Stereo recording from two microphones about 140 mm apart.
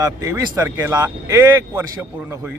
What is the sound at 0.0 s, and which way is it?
A man's voice, 25° right (ahead or behind).